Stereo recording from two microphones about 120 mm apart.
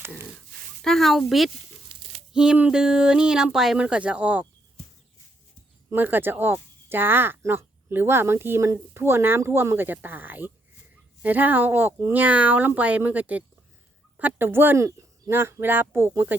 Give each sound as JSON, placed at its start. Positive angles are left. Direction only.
{"t": 0.8, "sound": "speech", "side_deg": 0}
{"t": 1.9, "sound": "a sound", "side_deg": -45}
{"t": 2.3, "sound": "speech", "side_deg": -5}
{"t": 5.9, "sound": "speech", "side_deg": -15}